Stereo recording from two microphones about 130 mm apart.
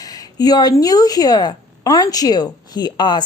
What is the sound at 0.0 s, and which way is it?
Speech, 30° left (ahead or behind).